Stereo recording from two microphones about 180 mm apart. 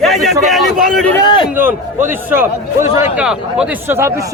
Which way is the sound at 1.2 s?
25° left (ahead or behind).